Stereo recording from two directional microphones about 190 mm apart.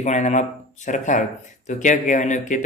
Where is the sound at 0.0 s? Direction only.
40° left (ahead or behind).